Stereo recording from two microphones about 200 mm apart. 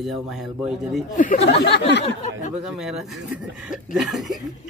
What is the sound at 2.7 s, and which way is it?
Speech, centre (ahead or behind).